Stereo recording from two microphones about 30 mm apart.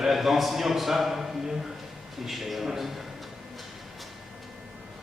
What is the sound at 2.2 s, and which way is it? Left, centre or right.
Speech, centre.